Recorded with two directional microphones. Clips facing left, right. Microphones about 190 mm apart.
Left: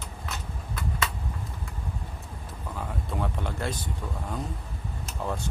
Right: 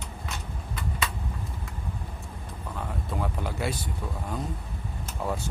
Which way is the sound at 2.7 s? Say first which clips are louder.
Even; centre (ahead or behind).